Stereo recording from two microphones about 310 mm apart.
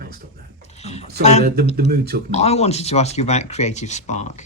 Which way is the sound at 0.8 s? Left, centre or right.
Centre.